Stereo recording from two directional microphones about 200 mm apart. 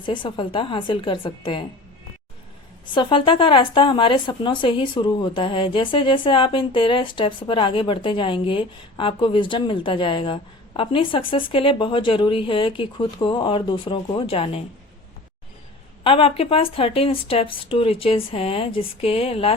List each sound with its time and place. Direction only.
0.0 s speech: 25° left (ahead or behind)
2.8 s speech: 25° left (ahead or behind)
16.0 s speech: 30° left (ahead or behind)